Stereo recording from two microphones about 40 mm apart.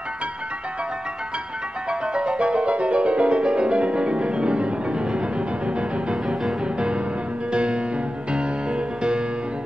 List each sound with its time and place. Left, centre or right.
1.9 s music: right